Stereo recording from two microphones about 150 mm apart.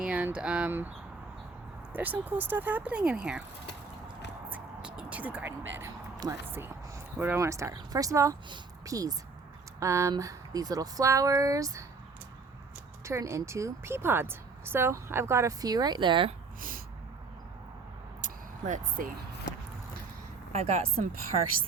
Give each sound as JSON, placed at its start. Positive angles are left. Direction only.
{"t": 0.0, "sound": "speech", "side_deg": -10}
{"t": 1.9, "sound": "speech", "side_deg": -10}
{"t": 4.4, "sound": "music", "side_deg": -10}
{"t": 6.5, "sound": "a woman's voice", "side_deg": -15}
{"t": 13.1, "sound": "a woman's voice", "side_deg": -20}
{"t": 16.6, "sound": "a sound", "side_deg": -70}
{"t": 18.2, "sound": "a sound", "side_deg": -60}
{"t": 20.5, "sound": "speech", "side_deg": -45}